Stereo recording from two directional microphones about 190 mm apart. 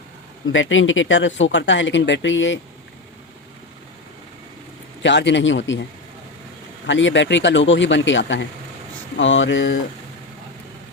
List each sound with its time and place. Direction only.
0.5 s speech: 90° left
5.0 s speech: 70° left (ahead or behind)
6.8 s speech: 75° left (ahead or behind)